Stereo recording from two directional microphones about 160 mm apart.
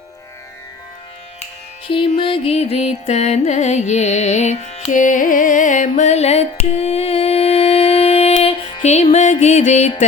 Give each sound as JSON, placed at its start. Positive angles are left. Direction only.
{"t": 1.9, "sound": "music", "side_deg": 30}